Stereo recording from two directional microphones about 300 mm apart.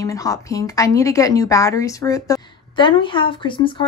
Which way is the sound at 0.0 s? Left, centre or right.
Centre.